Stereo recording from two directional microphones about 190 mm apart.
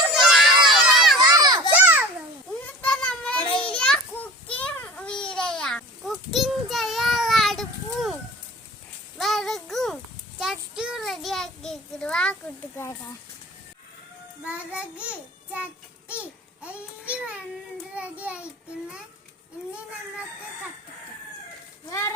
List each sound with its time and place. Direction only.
0.1 s crowd: centre (ahead or behind)
1.3 s children playing: 20° right (ahead or behind)
1.7 s babbling: 10° right (ahead or behind)
2.8 s a sound: 5° left (ahead or behind)
3.7 s children playing: 5° left (ahead or behind)
4.6 s child singing: 5° left (ahead or behind)
14.4 s child singing: 5° right (ahead or behind)
16.6 s a sound: 5° right (ahead or behind)
17.9 s child singing: 5° right (ahead or behind)
21.8 s speech: 15° left (ahead or behind)